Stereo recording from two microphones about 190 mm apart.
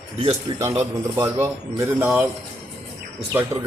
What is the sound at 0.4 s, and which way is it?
Speech, 25° right (ahead or behind).